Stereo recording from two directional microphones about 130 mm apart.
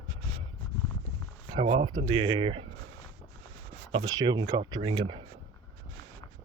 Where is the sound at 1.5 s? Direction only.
45° right (ahead or behind).